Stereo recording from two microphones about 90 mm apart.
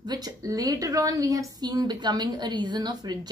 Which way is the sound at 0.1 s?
40° right (ahead or behind).